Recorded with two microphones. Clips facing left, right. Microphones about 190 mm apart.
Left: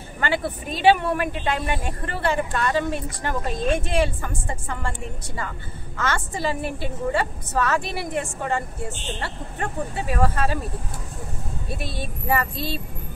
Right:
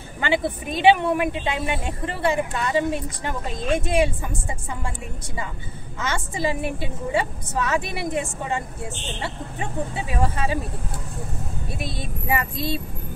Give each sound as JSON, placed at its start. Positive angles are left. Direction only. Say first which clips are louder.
{"t": 0.2, "sound": "speech", "louder": "right 2 dB", "side_deg": -15}
{"t": 11.8, "sound": "speech", "louder": "right 2 dB", "side_deg": -15}